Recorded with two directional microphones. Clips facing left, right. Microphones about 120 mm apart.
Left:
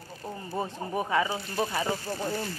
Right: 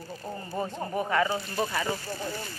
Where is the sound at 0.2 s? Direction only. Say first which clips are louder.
Even; 5° left (ahead or behind).